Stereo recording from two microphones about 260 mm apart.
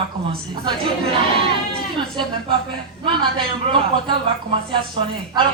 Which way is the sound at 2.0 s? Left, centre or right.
Centre.